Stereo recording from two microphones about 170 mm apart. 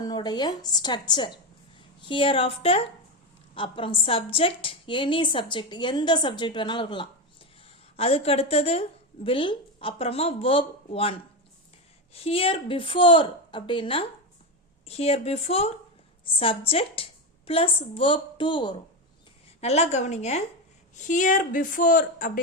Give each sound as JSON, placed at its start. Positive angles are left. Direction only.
{"t": 0.0, "sound": "a woman's voice", "side_deg": 25}
{"t": 19.6, "sound": "a woman's voice", "side_deg": 40}